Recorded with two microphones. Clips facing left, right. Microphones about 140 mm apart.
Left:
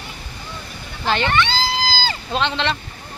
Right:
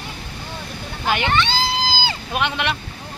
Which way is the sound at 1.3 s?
20° right (ahead or behind).